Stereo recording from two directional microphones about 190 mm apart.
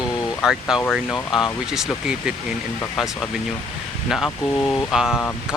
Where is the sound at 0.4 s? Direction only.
Centre (ahead or behind).